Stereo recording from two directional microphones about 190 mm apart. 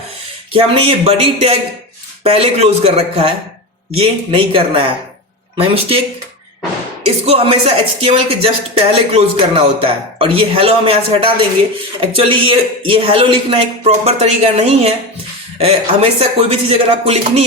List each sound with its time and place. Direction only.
0.5 s a man's voice: 30° right (ahead or behind)
7.0 s a man's voice: 30° right (ahead or behind)